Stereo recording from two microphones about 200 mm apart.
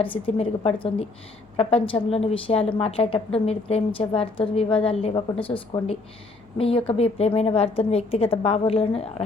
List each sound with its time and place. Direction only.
0.0 s a woman's voice: 25° left (ahead or behind)